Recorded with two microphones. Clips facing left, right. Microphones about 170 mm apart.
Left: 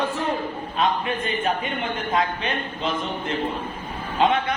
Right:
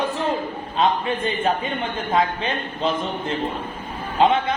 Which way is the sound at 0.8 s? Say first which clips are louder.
Right 3 dB; 30° right (ahead or behind).